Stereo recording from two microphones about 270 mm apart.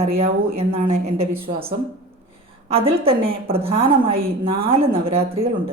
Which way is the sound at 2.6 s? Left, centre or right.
Right.